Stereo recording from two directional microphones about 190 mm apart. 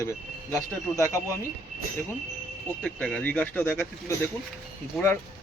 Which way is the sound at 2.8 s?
5° left (ahead or behind).